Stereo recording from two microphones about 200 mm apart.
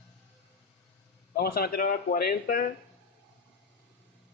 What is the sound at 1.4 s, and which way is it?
A man's voice, 50° left (ahead or behind).